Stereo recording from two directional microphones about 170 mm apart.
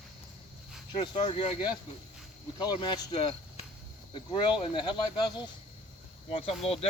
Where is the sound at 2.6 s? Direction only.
25° left (ahead or behind).